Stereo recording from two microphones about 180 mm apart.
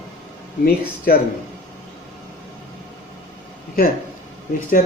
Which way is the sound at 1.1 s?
55° left (ahead or behind).